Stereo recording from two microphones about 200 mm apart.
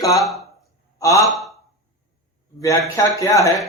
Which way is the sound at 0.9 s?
15° left (ahead or behind).